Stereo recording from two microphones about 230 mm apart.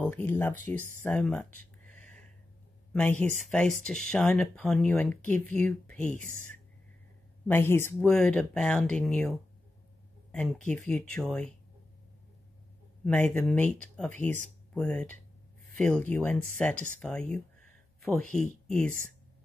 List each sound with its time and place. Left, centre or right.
0.0 s speech: centre
1.9 s a sound: centre
2.9 s speech: centre
6.2 s speech: right
7.4 s speech: centre
13.0 s speech: centre
16.7 s speech: right
17.0 s speech: centre